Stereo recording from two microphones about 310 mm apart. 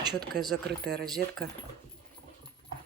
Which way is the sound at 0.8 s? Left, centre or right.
Right.